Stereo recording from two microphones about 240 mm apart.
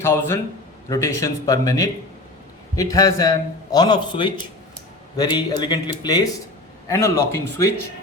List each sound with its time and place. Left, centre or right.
0.0 s a man's voice: centre